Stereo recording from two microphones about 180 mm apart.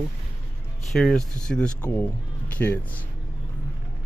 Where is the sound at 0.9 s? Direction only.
5° left (ahead or behind).